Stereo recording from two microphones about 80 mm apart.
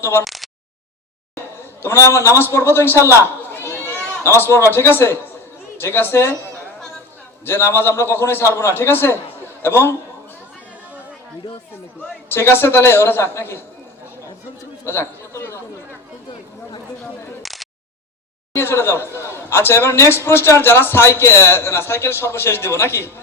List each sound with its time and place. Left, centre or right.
0.0 s a man's voice: left
0.3 s a sound: centre
1.8 s a man's voice: left
3.5 s a sound: left
4.2 s a man's voice: left
7.4 s a man's voice: left
12.3 s a man's voice: left
14.8 s speech: left
17.4 s a sound: centre
18.5 s a man's voice: left